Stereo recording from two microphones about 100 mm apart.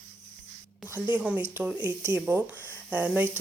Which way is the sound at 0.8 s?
20° right (ahead or behind).